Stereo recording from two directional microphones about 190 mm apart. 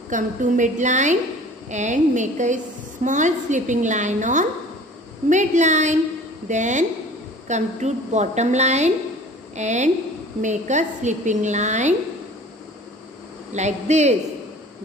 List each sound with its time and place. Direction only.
0.1 s a woman's voice: 40° right (ahead or behind)
13.5 s a woman's voice: 35° right (ahead or behind)